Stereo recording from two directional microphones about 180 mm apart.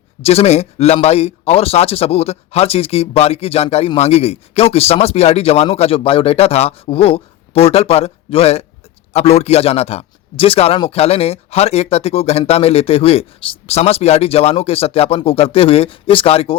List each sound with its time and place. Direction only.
0.2 s speech: 35° left (ahead or behind)